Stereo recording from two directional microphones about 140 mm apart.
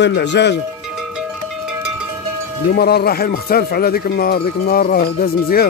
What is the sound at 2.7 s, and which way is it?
Speech, 90° left.